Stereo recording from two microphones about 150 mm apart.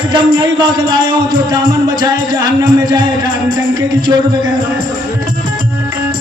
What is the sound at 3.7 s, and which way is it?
Music, 25° right (ahead or behind).